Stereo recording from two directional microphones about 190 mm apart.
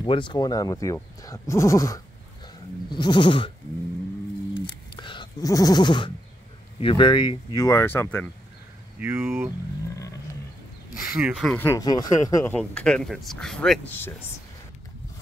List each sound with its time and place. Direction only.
0.0 s speech: 25° left (ahead or behind)
2.9 s goat: 25° left (ahead or behind)
4.6 s bleat: 25° left (ahead or behind)
6.8 s speech: 30° left (ahead or behind); by 8.3 s 10° left (ahead or behind)
9.0 s speech: 15° right (ahead or behind)
11.1 s speech: 10° right (ahead or behind)
11.4 s speech: 10° left (ahead or behind)
12.5 s speech: 5° left (ahead or behind)